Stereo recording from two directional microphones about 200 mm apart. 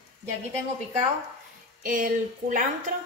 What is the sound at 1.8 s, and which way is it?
Speech, 45° right (ahead or behind).